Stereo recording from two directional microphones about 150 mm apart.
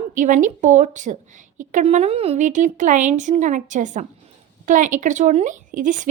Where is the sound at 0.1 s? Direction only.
55° right (ahead or behind).